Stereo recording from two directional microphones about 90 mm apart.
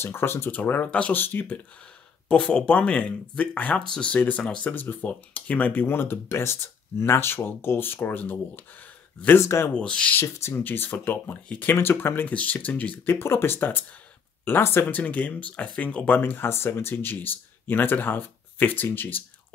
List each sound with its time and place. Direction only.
0.0 s speech: 25° left (ahead or behind)
2.2 s speech: 10° left (ahead or behind); by 9.7 s 30° left (ahead or behind)
9.8 s speech: 10° left (ahead or behind)
10.2 s speech: 30° left (ahead or behind)